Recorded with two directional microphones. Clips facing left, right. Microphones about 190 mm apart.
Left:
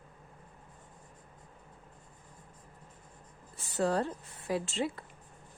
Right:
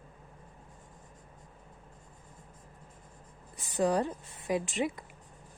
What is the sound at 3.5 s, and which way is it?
Speech, 15° right (ahead or behind).